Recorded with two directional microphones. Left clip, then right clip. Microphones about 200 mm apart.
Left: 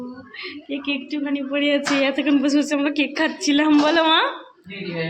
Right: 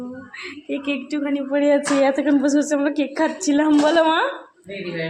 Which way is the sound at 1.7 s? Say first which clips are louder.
Right 3 dB; 5° right (ahead or behind).